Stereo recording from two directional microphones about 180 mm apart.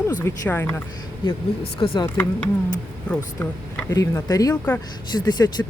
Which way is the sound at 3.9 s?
20° left (ahead or behind).